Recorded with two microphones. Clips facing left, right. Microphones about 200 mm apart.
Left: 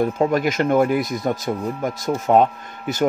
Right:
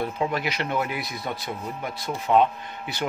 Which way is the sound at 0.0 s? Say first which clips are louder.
Left 8 dB; 45° left (ahead or behind).